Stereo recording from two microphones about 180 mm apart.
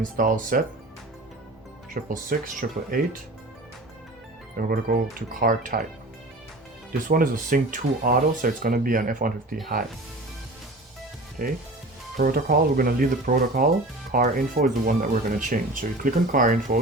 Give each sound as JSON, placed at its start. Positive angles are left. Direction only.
{"t": 0.0, "sound": "speech", "side_deg": -50}
{"t": 1.9, "sound": "speech", "side_deg": -50}
{"t": 4.5, "sound": "speech", "side_deg": -50}
{"t": 7.1, "sound": "speech", "side_deg": -50}
{"t": 11.4, "sound": "speech", "side_deg": -50}